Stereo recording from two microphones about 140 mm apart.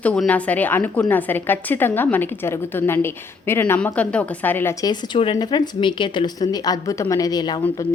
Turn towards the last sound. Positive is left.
turn(degrees=30)  # may be behind; listen again after turning